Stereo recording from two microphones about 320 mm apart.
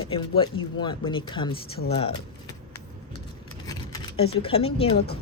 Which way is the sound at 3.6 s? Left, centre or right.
Centre.